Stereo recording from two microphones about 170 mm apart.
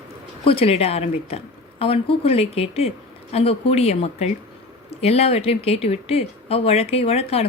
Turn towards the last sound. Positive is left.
turn(degrees=35)  # may be behind; listen again after turning